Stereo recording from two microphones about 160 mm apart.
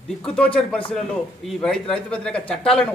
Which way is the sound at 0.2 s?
5° left (ahead or behind).